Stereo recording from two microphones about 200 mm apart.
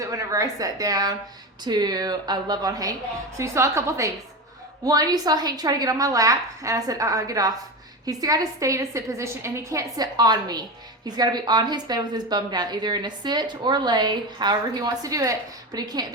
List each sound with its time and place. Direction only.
0.0 s a woman's voice: 15° right (ahead or behind)